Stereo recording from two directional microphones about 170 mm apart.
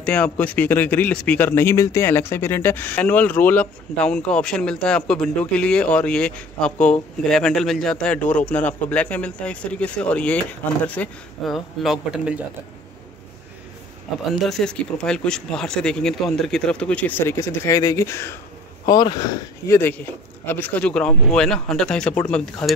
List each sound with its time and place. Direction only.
0.0 s speech: 5° left (ahead or behind)
14.3 s speech: centre (ahead or behind); by 19.8 s 20° left (ahead or behind)
20.4 s speech: 10° left (ahead or behind)